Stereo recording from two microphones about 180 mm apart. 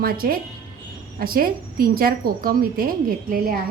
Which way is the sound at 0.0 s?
55° right (ahead or behind).